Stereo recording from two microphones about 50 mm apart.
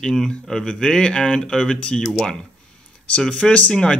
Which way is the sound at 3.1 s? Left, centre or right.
Centre.